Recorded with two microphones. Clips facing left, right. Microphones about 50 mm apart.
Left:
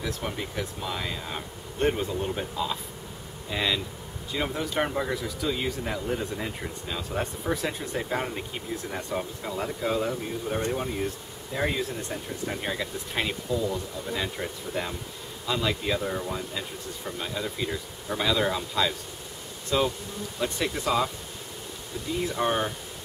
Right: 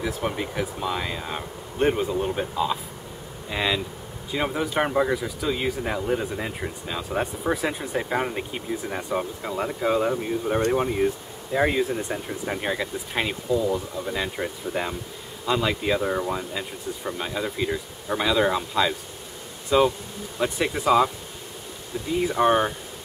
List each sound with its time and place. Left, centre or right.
0.2 s speech: centre
22.2 s speech: centre